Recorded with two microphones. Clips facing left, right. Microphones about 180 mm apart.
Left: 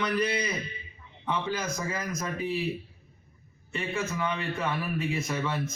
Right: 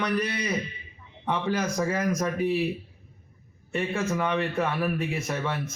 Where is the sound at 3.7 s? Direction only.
50° right (ahead or behind).